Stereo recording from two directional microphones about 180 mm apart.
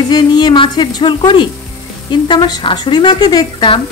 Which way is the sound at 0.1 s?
25° left (ahead or behind).